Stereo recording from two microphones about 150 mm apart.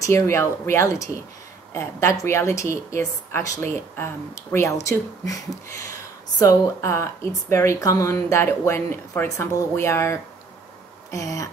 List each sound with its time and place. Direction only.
0.0 s a woman's voice: 20° left (ahead or behind)